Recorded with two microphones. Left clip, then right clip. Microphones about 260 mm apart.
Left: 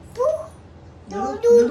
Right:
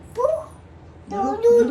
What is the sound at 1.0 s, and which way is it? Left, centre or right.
Speech, centre.